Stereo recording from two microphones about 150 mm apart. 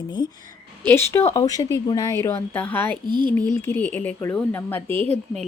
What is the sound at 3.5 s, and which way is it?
Speech, 15° left (ahead or behind).